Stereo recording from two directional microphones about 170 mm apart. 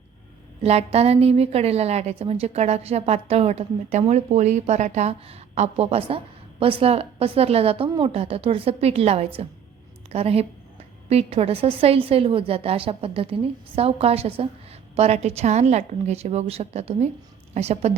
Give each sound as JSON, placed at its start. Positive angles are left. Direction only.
{"t": 0.6, "sound": "a woman's voice", "side_deg": -35}